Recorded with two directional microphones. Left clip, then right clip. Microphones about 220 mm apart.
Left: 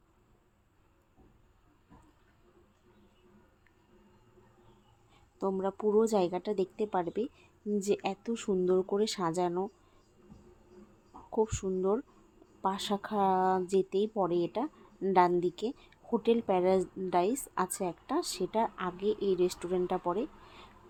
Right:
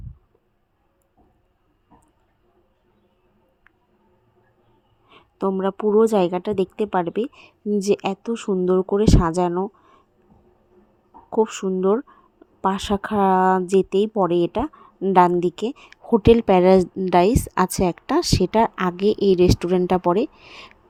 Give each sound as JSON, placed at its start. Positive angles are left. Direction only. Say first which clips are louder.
{"t": 5.0, "sound": "a woman's voice", "louder": "right 10 dB", "side_deg": -30}
{"t": 11.3, "sound": "a woman's voice", "louder": "right 10 dB", "side_deg": -30}